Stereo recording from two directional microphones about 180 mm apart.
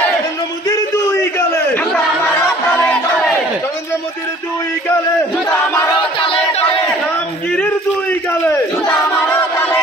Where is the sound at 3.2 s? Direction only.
15° left (ahead or behind).